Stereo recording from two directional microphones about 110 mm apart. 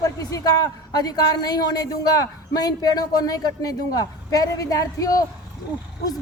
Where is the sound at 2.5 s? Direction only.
35° left (ahead or behind).